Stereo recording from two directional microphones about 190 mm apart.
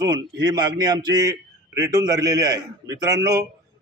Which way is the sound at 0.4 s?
20° right (ahead or behind).